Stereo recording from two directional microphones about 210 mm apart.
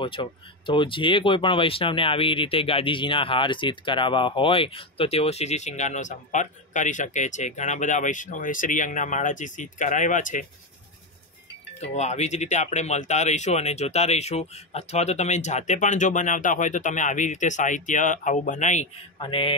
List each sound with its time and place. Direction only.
0.0 s speech: 25° left (ahead or behind)
11.8 s speech: 30° left (ahead or behind)